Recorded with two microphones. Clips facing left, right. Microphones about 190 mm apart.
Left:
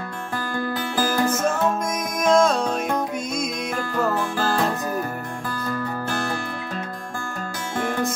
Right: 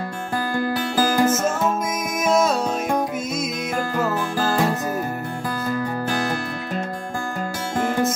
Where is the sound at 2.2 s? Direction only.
5° right (ahead or behind).